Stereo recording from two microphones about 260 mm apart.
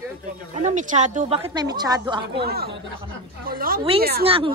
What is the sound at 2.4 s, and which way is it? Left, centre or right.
Speech, right.